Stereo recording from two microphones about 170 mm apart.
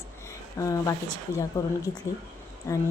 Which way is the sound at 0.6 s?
20° left (ahead or behind).